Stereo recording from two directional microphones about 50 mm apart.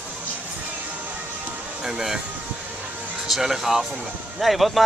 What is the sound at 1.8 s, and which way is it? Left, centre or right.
Speech, centre.